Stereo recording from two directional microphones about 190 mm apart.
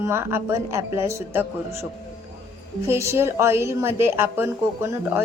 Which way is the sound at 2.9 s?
15° right (ahead or behind).